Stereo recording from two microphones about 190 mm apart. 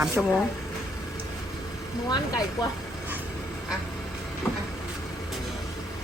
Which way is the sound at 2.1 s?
20° left (ahead or behind).